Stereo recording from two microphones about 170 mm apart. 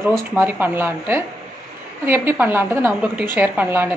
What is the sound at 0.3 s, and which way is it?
A woman's voice, 10° right (ahead or behind).